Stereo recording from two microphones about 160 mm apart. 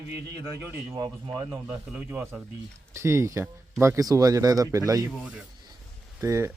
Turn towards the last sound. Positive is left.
turn(degrees=-15)  # may be behind; listen again after turning